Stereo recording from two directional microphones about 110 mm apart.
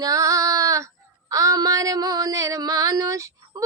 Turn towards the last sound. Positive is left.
turn(degrees=-30)  # may be behind; listen again after turning